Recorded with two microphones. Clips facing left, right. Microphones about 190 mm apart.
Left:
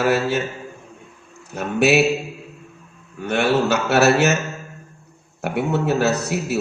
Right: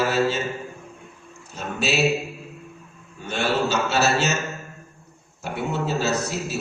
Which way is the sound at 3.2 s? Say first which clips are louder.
Left 5 dB; 65° left (ahead or behind).